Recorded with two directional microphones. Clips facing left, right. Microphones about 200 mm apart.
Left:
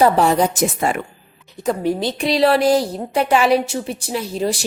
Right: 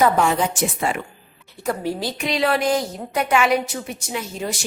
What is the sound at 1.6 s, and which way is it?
A woman's voice, 20° left (ahead or behind).